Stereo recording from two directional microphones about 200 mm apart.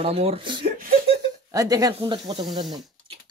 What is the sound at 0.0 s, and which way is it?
Speech, 30° right (ahead or behind).